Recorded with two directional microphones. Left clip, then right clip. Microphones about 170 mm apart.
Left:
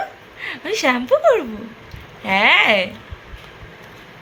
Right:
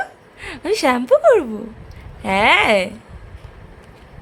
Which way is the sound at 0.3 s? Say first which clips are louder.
Right 2 dB; 90° right.